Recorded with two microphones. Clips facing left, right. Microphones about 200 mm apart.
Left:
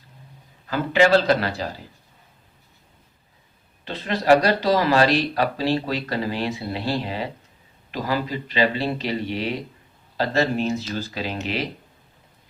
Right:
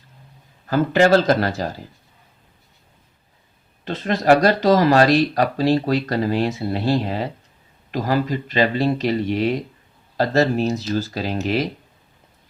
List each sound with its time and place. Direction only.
0.7 s speech: 45° right (ahead or behind)
3.8 s speech: 45° right (ahead or behind)